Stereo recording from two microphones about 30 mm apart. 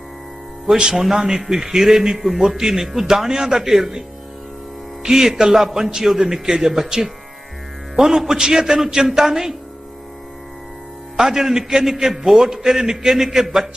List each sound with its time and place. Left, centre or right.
0.8 s a man's voice: right
1.0 s a man's voice: centre
5.0 s a man's voice: centre
11.2 s a man's voice: centre